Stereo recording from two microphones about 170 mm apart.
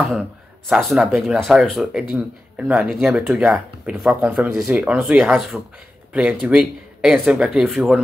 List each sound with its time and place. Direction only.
0.7 s speech: centre (ahead or behind)